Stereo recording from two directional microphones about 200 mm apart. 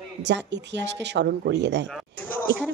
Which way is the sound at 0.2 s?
60° right (ahead or behind).